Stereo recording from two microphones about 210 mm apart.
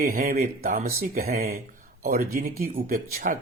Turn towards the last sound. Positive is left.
turn(degrees=-45)  # may be behind; listen again after turning